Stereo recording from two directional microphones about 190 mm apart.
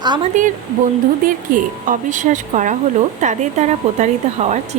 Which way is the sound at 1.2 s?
45° right (ahead or behind).